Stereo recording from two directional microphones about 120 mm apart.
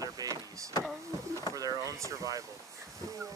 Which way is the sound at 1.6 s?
30° right (ahead or behind).